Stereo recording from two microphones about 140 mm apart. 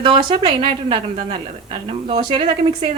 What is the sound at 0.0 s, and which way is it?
Speech, 35° right (ahead or behind).